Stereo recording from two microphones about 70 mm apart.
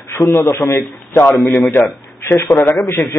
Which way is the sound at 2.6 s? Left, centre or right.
Left.